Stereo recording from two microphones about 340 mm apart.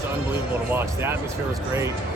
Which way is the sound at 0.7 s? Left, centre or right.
Centre.